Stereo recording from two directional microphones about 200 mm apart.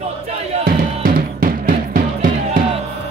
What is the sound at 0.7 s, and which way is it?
Music, 45° right (ahead or behind).